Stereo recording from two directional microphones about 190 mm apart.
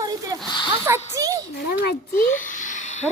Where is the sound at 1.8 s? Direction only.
50° left (ahead or behind).